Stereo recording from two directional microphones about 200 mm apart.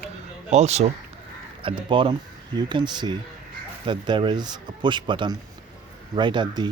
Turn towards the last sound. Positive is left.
turn(degrees=-25)  # may be behind; listen again after turning